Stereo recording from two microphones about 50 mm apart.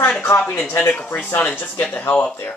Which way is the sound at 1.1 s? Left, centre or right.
Left.